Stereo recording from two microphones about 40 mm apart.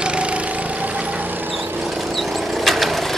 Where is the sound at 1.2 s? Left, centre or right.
Right.